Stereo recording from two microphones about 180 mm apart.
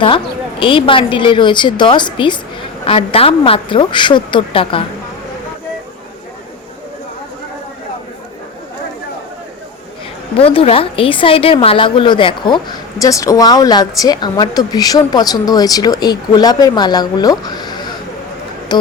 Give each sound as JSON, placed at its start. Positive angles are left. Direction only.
{"t": 0.6, "sound": "a woman's voice", "side_deg": 30}
{"t": 10.3, "sound": "a woman's voice", "side_deg": 30}